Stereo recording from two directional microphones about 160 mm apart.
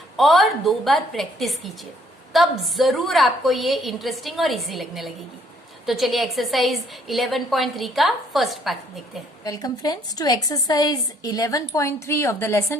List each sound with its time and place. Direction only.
0.2 s a woman's voice: centre (ahead or behind)
9.4 s a woman's voice: 25° left (ahead or behind)